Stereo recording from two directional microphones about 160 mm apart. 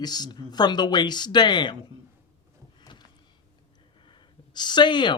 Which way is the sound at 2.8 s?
30° left (ahead or behind).